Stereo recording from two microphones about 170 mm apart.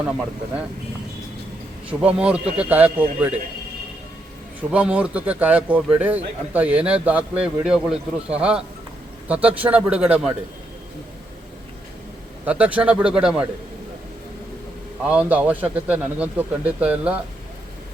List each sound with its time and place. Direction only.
1.9 s speech: 5° right (ahead or behind)
4.7 s speech: 5° right (ahead or behind)
12.5 s speech: 10° right (ahead or behind)
15.0 s speech: 10° right (ahead or behind)